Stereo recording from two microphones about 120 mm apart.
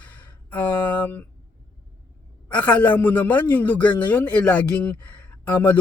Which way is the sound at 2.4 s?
10° left (ahead or behind).